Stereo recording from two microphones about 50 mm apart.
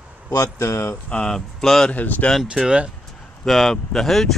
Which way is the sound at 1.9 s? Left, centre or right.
Left.